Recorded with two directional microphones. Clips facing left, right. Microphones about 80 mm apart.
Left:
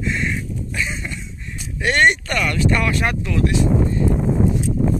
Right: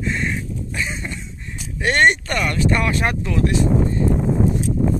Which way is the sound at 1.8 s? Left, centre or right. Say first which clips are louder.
Even; right.